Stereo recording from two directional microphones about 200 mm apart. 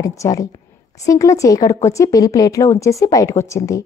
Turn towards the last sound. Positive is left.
turn(degrees=15)  # may be behind; listen again after turning